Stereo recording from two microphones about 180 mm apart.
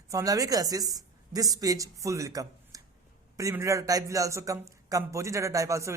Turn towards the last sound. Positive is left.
turn(degrees=-15)  # may be behind; listen again after turning